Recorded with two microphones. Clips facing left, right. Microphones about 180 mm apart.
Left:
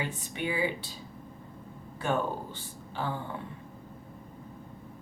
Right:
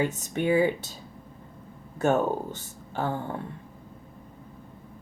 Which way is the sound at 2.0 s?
45° right (ahead or behind).